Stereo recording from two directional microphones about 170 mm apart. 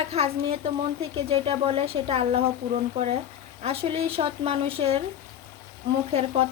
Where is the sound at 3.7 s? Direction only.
35° right (ahead or behind).